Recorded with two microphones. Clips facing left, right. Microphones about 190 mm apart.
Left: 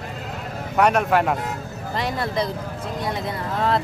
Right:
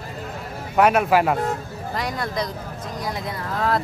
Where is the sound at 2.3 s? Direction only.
30° left (ahead or behind).